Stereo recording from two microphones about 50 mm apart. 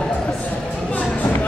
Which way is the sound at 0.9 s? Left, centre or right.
Left.